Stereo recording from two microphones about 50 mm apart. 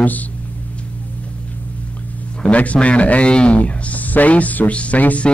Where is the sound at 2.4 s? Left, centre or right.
Left.